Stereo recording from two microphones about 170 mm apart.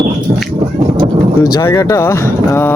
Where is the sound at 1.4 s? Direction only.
20° left (ahead or behind).